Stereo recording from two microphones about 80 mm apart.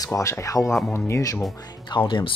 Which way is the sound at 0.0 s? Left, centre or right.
Left.